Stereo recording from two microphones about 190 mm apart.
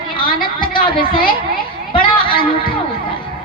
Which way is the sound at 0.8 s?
50° left (ahead or behind).